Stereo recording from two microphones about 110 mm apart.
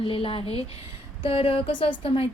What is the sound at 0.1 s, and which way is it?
Speech, 55° left (ahead or behind).